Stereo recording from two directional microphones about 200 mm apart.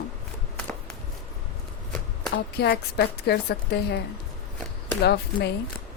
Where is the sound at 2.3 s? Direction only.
55° left (ahead or behind).